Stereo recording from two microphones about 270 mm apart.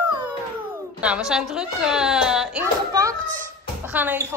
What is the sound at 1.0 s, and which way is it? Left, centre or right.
A child's voice, centre.